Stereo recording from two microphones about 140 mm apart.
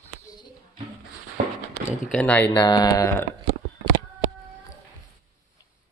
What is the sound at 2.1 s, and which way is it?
Speech, 10° left (ahead or behind).